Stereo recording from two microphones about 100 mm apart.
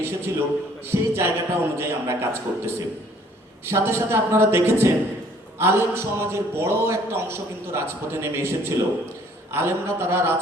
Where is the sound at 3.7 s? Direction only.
25° right (ahead or behind).